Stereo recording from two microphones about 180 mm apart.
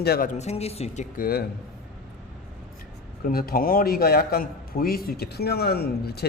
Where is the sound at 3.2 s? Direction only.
55° left (ahead or behind).